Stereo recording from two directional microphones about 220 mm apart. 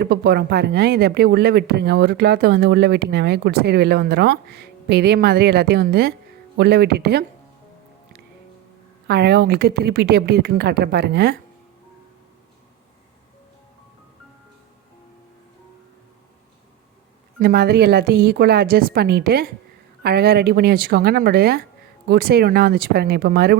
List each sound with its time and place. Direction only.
0.0 s speech: 45° right (ahead or behind)
9.0 s speech: 50° right (ahead or behind)
17.4 s speech: 45° right (ahead or behind)